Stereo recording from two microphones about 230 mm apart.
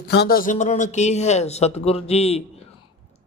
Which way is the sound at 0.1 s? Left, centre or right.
Left.